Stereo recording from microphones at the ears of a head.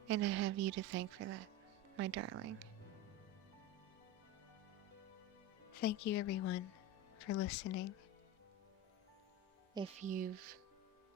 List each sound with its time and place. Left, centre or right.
0.1 s a woman's voice: right
5.7 s speech: left
9.8 s a woman's voice: right